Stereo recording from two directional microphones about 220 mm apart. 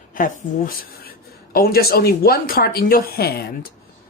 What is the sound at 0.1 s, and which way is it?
A woman's voice, 40° left (ahead or behind).